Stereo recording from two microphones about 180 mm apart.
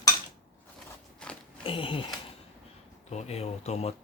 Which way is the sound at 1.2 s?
5° left (ahead or behind).